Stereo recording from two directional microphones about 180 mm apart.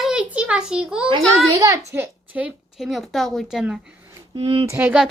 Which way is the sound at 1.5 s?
20° right (ahead or behind).